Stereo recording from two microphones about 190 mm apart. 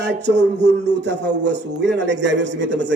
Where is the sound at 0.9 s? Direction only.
65° right (ahead or behind).